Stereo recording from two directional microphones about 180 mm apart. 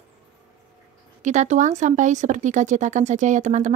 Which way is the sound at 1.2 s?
40° right (ahead or behind).